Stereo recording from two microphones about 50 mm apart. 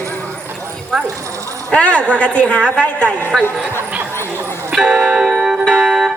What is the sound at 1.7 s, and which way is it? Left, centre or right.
A woman's voice, left.